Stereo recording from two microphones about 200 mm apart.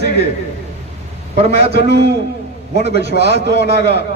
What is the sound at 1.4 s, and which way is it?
Speech, 30° right (ahead or behind).